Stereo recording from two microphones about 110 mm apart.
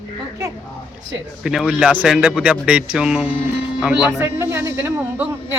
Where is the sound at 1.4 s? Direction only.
5° right (ahead or behind).